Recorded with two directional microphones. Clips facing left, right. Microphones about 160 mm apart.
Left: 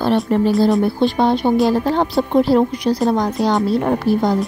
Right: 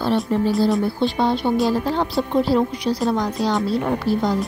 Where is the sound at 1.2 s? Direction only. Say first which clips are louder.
Left 4 dB; 60° left (ahead or behind).